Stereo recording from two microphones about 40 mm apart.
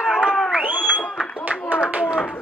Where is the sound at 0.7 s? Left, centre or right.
Right.